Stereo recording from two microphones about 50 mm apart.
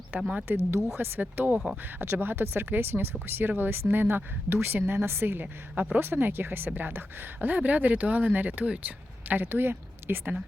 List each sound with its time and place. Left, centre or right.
0.2 s speech: right
0.4 s speech: right